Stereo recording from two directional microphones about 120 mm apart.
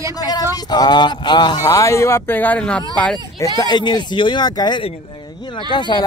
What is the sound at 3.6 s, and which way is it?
Speech, 35° left (ahead or behind).